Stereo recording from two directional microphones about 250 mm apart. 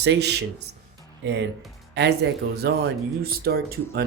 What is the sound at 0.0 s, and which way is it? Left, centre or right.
Speech, right.